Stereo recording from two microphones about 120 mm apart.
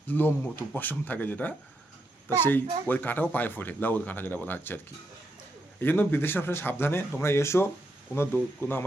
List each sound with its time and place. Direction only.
0.1 s speech: 15° left (ahead or behind)
5.8 s speech: 15° left (ahead or behind)